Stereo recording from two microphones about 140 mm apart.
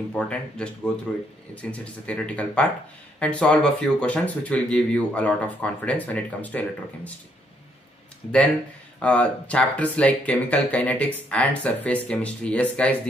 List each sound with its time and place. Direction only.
0.1 s speech: 5° left (ahead or behind)
9.0 s speech: 10° left (ahead or behind)